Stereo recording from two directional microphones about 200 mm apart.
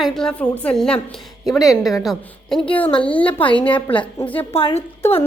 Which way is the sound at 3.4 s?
25° left (ahead or behind).